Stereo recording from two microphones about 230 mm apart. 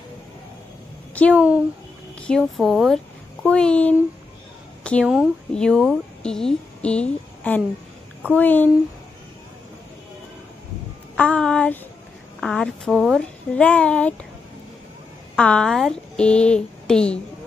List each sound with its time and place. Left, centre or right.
1.3 s a woman's voice: centre
11.1 s a woman's voice: centre
15.3 s speech: centre